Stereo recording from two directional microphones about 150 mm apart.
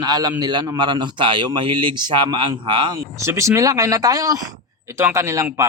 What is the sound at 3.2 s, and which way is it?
Speech, 20° right (ahead or behind).